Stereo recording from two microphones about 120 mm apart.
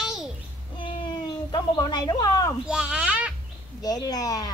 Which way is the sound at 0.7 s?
45° left (ahead or behind).